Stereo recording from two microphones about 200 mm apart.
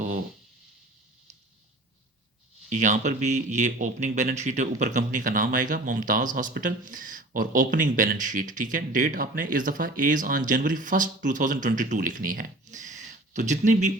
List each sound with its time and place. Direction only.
2.6 s speech: 40° right (ahead or behind)